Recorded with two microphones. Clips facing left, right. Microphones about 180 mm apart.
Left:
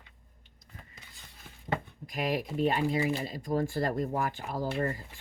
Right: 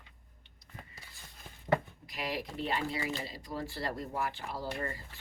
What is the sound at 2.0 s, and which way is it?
Speech, 50° left (ahead or behind).